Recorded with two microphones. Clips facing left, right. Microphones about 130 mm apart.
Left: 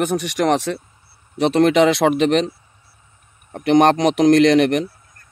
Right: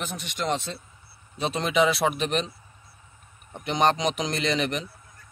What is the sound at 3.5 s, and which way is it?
Speech, 75° left (ahead or behind).